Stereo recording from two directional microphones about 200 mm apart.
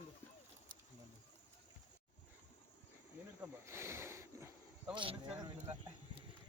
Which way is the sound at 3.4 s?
10° right (ahead or behind).